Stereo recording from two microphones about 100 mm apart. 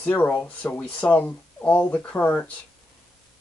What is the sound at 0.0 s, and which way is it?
Speech, 15° left (ahead or behind).